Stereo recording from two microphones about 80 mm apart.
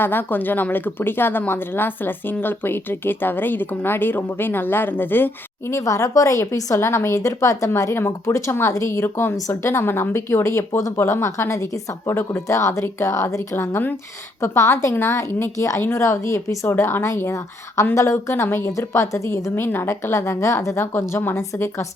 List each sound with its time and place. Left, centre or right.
0.0 s speech: left
5.7 s a woman's voice: left